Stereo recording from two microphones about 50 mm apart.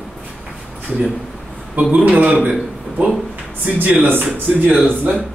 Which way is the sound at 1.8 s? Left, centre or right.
Right.